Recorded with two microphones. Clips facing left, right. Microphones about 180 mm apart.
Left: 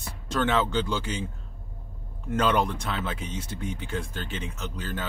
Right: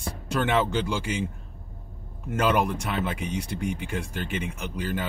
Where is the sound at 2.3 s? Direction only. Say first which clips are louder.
Right 1 dB; 10° right (ahead or behind).